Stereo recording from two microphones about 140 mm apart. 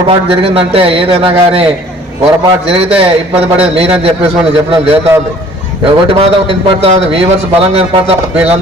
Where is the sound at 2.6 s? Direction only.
45° right (ahead or behind).